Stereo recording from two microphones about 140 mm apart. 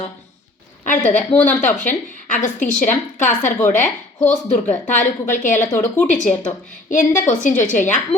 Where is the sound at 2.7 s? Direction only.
65° left (ahead or behind).